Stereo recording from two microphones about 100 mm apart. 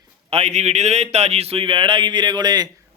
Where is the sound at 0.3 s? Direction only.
90° right.